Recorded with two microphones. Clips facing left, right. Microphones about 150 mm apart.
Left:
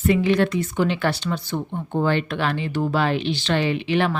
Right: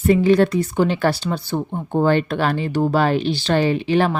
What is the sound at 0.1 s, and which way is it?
Speech, 40° right (ahead or behind).